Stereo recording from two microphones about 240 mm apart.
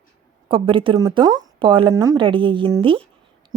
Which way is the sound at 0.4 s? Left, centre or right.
Right.